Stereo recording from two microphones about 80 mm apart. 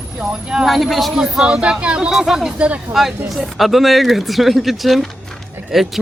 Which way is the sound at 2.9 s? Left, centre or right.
Centre.